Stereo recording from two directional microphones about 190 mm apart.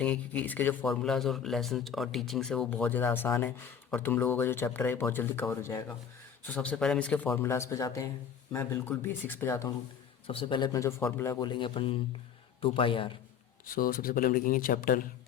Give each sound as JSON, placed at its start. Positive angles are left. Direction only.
{"t": 0.0, "sound": "speech", "side_deg": 5}
{"t": 10.2, "sound": "a man's voice", "side_deg": 25}
{"t": 13.7, "sound": "speech", "side_deg": 50}